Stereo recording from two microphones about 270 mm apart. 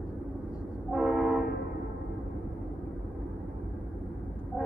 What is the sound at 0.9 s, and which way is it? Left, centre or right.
Train, centre.